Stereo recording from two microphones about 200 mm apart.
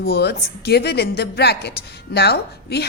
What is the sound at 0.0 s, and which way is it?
A woman's voice, 55° left (ahead or behind).